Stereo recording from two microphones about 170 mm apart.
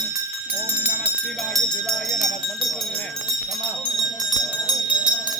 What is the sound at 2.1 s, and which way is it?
Speech, centre (ahead or behind).